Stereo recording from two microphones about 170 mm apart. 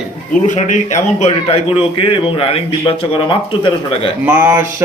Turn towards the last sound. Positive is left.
turn(degrees=-15)  # may be behind; listen again after turning